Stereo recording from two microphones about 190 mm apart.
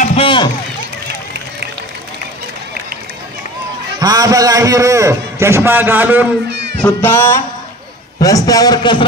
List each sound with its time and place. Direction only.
0.0 s run: 30° left (ahead or behind)
4.0 s a man's voice: 20° right (ahead or behind)
6.8 s music: 10° left (ahead or behind)
8.2 s a man's voice: 15° left (ahead or behind)